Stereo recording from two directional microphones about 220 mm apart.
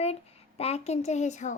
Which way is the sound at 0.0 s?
30° left (ahead or behind).